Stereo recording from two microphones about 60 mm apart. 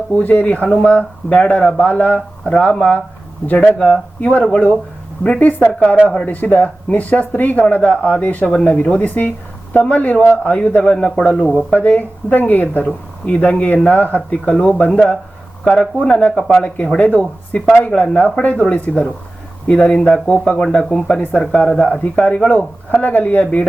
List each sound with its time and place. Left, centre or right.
0.1 s speech: left